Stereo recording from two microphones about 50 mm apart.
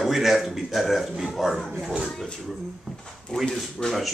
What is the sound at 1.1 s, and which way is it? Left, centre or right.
Speech, centre.